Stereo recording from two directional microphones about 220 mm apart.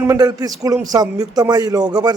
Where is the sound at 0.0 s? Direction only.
15° right (ahead or behind).